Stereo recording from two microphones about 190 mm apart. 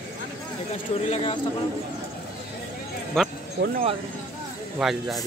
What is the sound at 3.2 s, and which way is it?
Speech, centre (ahead or behind).